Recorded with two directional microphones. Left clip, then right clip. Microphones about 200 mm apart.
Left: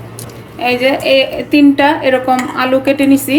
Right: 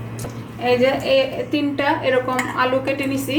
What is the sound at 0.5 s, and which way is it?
A woman's voice, 55° left (ahead or behind).